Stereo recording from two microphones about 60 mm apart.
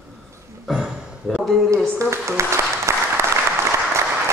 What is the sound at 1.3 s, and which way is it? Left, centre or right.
Speech, centre.